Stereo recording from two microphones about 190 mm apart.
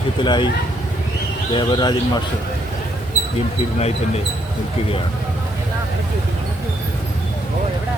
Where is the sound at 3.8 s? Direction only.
35° left (ahead or behind).